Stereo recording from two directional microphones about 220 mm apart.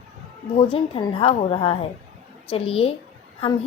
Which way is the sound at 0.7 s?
25° left (ahead or behind).